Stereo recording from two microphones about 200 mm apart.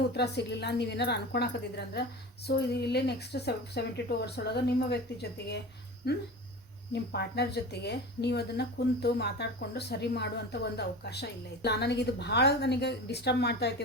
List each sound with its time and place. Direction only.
0.1 s speech: 55° left (ahead or behind)